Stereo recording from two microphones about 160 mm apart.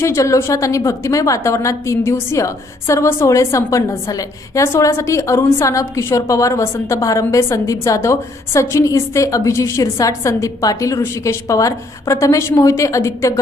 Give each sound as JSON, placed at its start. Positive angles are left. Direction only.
{"t": 0.0, "sound": "a woman's voice", "side_deg": 20}